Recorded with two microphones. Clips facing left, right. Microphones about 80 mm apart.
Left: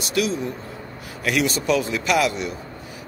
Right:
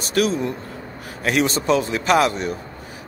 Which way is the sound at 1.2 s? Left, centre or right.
Right.